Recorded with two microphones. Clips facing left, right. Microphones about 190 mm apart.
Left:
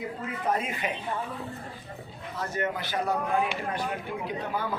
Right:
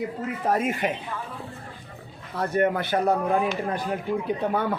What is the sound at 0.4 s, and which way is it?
Speech, 45° right (ahead or behind).